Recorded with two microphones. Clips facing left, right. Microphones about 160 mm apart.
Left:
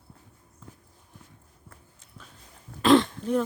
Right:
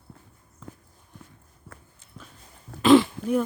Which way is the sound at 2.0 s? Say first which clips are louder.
Right 3 dB; centre (ahead or behind).